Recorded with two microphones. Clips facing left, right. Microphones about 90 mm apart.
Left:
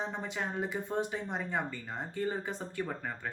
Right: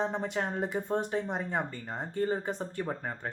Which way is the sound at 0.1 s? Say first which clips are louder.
Right 4 dB; 45° right (ahead or behind).